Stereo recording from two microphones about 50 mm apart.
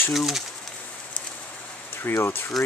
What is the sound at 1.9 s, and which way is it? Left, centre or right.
Speech, left.